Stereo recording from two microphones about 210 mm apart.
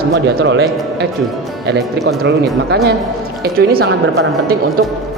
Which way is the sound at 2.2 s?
50° right (ahead or behind).